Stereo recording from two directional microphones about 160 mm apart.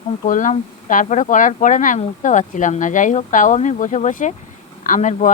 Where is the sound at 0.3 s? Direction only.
55° left (ahead or behind).